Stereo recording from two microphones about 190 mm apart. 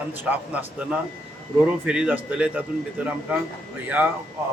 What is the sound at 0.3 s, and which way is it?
Speech, 5° right (ahead or behind).